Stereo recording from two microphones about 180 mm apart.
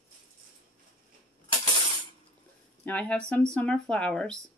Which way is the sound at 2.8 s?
10° left (ahead or behind).